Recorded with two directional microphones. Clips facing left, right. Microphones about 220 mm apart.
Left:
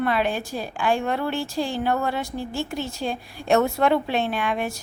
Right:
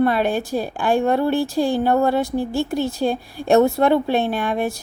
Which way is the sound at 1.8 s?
35° right (ahead or behind).